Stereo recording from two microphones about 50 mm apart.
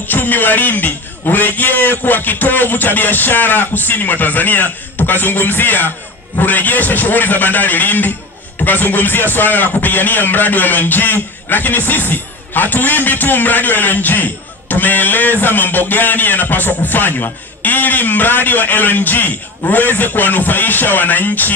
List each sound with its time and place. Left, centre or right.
0.0 s speech: left